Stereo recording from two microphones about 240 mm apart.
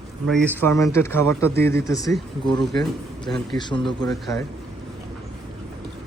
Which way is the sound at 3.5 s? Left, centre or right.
Centre.